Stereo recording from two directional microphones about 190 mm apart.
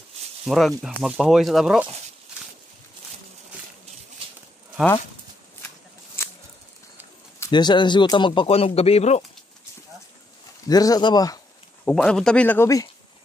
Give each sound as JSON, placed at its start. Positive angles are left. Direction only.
{"t": 0.5, "sound": "speech", "side_deg": 0}
{"t": 6.2, "sound": "a sound", "side_deg": 15}
{"t": 7.3, "sound": "speech", "side_deg": 20}
{"t": 10.7, "sound": "speech", "side_deg": 20}
{"t": 11.8, "sound": "speech", "side_deg": 5}